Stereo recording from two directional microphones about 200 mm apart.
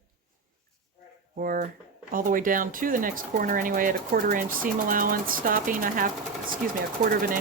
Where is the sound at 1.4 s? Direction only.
45° right (ahead or behind).